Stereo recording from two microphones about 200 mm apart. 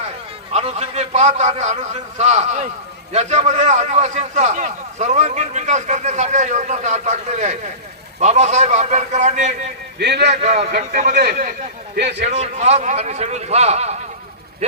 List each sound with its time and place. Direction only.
0.5 s a man's voice: 35° right (ahead or behind)
10.0 s a man's voice: 55° right (ahead or behind)
10.4 s a man's voice: 35° right (ahead or behind)
10.7 s a man's voice: 45° right (ahead or behind)
12.2 s a man's voice: 35° right (ahead or behind)